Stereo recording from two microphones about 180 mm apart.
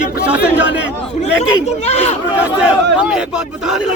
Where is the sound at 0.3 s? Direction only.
10° right (ahead or behind).